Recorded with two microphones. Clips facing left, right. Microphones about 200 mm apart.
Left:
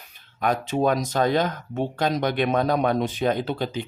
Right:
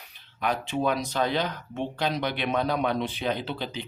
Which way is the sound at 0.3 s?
45° left (ahead or behind).